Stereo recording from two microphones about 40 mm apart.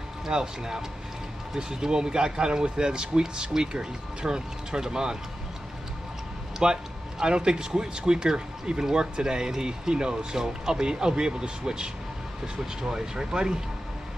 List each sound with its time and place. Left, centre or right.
0.3 s a man's voice: centre
6.6 s a man's voice: centre